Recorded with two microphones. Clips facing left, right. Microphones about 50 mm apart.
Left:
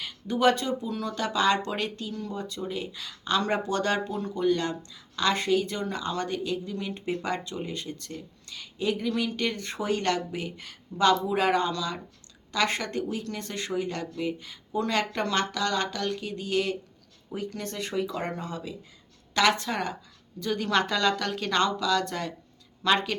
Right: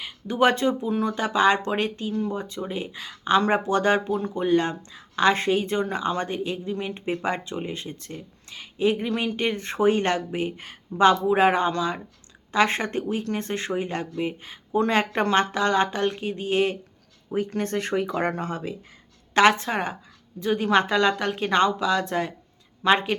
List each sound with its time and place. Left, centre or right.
0.0 s speech: right
19.3 s speech: right